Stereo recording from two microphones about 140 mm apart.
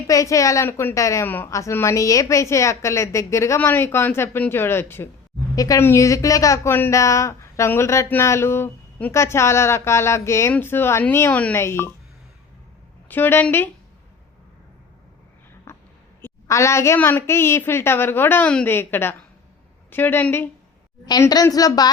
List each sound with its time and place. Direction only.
0.1 s a woman's voice: 25° left (ahead or behind)
13.1 s a woman's voice: 15° left (ahead or behind)
15.7 s a sound: 20° left (ahead or behind)
16.2 s a woman's voice: 20° left (ahead or behind)
21.1 s a woman's voice: 25° left (ahead or behind)